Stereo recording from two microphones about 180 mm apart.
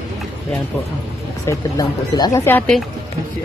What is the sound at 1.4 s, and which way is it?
Speech, 20° left (ahead or behind).